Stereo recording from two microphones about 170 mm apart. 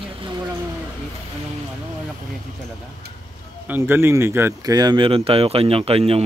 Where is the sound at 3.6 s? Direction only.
10° right (ahead or behind).